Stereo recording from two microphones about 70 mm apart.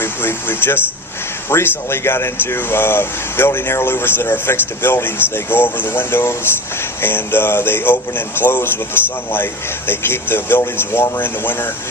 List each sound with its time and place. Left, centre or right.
0.0 s music: left
1.5 s speech: left